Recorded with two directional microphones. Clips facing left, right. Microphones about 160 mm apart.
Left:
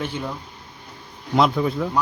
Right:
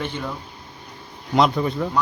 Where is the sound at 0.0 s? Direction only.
10° left (ahead or behind).